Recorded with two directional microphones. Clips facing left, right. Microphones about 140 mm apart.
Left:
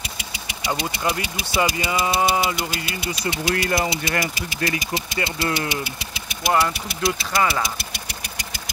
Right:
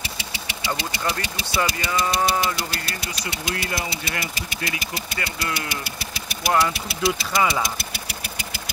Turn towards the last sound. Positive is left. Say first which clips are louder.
# even
turn(degrees=0)  # may be behind; listen again after turning